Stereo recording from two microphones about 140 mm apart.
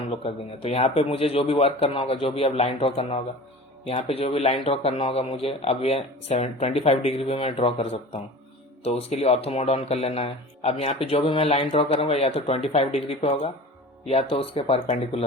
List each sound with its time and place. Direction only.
0.1 s speech: 45° left (ahead or behind)